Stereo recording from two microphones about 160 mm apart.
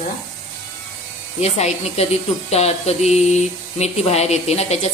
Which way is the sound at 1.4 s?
40° left (ahead or behind).